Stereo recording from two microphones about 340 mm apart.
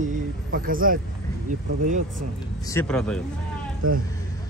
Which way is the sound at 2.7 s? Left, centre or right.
Centre.